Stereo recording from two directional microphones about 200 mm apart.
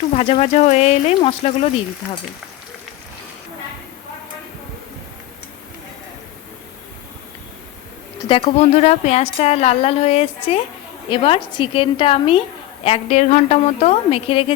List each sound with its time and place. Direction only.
0.2 s a woman's voice: 30° left (ahead or behind)
8.3 s a woman's voice: 30° left (ahead or behind)